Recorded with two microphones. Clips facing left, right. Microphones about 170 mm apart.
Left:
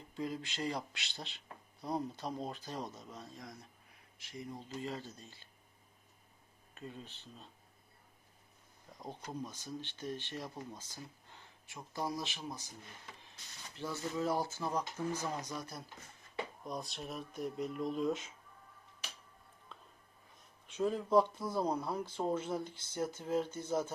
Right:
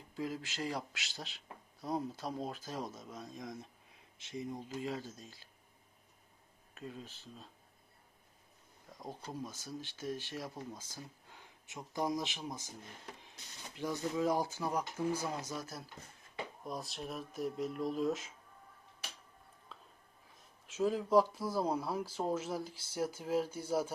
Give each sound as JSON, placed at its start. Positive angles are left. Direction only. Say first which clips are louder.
{"t": 0.1, "sound": "speech", "louder": "even", "side_deg": -5}
{"t": 4.6, "sound": "speech", "louder": "right 2 dB", "side_deg": -10}
{"t": 6.7, "sound": "speech", "louder": "right 1 dB", "side_deg": 0}
{"t": 8.9, "sound": "speech", "louder": "even", "side_deg": 0}
{"t": 13.7, "sound": "speech", "louder": "right 3 dB", "side_deg": -15}
{"t": 20.7, "sound": "speech", "louder": "right 1 dB", "side_deg": -5}